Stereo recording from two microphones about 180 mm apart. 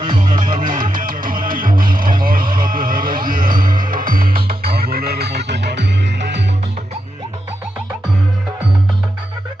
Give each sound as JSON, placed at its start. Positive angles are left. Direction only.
{"t": 0.5, "sound": "music", "side_deg": -50}